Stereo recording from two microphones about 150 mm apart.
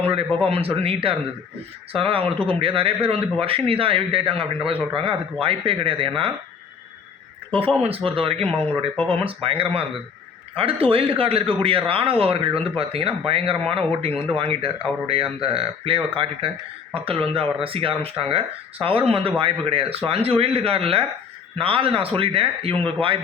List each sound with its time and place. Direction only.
0.3 s a man's voice: 5° left (ahead or behind)
0.5 s a man's voice: 40° right (ahead or behind)
7.8 s a man's voice: 40° right (ahead or behind)